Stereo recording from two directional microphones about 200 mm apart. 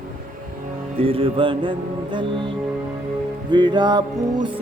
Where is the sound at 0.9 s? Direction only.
30° right (ahead or behind).